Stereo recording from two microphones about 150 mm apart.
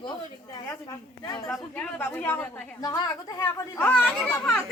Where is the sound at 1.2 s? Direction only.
25° left (ahead or behind).